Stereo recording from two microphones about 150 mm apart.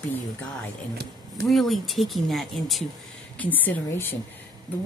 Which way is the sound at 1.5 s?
Centre (ahead or behind).